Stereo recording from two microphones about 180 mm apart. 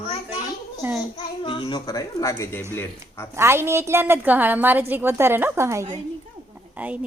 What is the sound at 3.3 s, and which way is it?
A woman's voice, 15° right (ahead or behind).